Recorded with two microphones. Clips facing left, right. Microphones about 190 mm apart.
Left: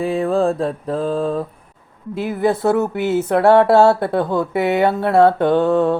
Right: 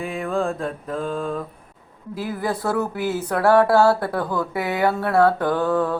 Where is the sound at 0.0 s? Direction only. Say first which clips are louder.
Left 7 dB; 35° left (ahead or behind).